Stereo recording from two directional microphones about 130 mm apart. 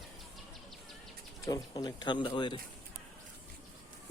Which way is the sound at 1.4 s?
30° left (ahead or behind).